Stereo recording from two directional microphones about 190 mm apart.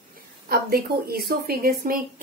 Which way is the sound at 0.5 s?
55° right (ahead or behind).